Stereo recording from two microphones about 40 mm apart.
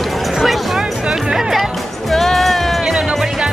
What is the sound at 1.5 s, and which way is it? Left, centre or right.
Music, centre.